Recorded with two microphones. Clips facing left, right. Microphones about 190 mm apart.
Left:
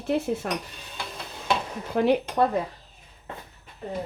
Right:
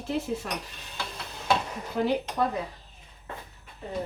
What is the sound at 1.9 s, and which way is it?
Speech, 60° left (ahead or behind).